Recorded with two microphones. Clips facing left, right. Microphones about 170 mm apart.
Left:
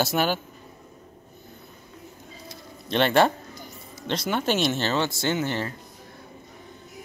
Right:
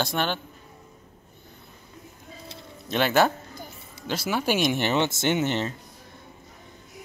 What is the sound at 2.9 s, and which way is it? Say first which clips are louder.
Speech: left 1 dB; 5° right (ahead or behind).